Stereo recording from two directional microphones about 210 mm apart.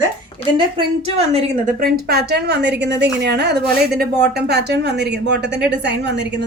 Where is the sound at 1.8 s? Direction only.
50° right (ahead or behind).